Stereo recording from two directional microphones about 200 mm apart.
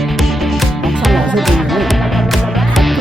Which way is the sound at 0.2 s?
Centre (ahead or behind).